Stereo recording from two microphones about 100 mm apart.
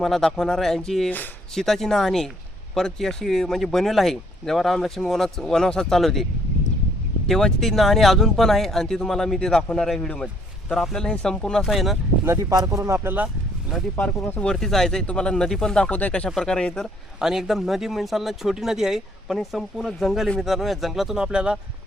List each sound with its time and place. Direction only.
0.0 s speech: 5° left (ahead or behind)
7.3 s speech: 5° left (ahead or behind)
12.5 s speech: 35° right (ahead or behind)
13.1 s speech: 5° right (ahead or behind)
14.3 s speech: 5° left (ahead or behind)
17.2 s speech: 5° right (ahead or behind)